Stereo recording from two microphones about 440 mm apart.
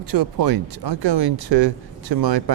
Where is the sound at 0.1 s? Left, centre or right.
Right.